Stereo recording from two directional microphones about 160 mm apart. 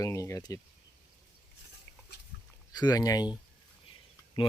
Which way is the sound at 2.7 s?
25° left (ahead or behind).